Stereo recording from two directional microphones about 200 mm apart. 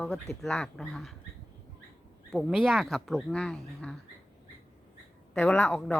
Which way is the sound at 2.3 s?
Centre (ahead or behind).